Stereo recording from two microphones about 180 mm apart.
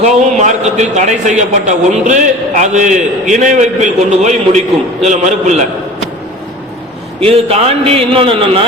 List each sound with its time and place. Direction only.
0.0 s a man's voice: 40° right (ahead or behind)
7.2 s a man's voice: 30° right (ahead or behind)